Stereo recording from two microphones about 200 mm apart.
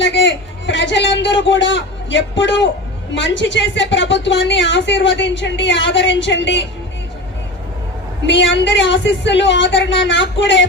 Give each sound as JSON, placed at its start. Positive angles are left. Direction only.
{"t": 0.0, "sound": "a sound", "side_deg": 65}
{"t": 3.1, "sound": "a woman's voice", "side_deg": 65}
{"t": 8.3, "sound": "a woman's voice", "side_deg": 65}